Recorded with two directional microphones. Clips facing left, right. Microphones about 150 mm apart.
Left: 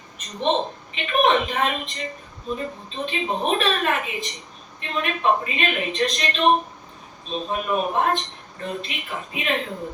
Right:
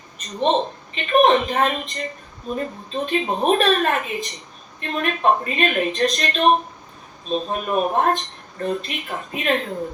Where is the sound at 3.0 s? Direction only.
45° right (ahead or behind).